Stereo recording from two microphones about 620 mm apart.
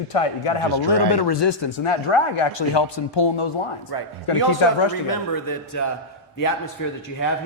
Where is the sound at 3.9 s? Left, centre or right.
Left.